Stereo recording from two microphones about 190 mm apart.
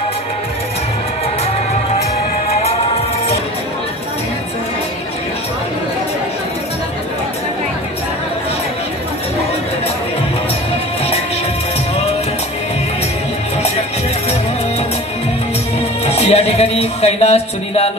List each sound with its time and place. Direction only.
16.1 s speech: 35° left (ahead or behind)